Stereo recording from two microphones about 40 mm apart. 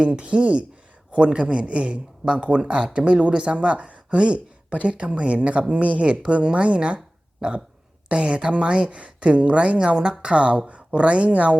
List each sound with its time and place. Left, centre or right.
0.0 s a woman's voice: right